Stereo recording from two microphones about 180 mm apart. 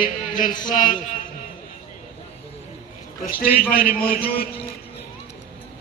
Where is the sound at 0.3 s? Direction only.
45° left (ahead or behind).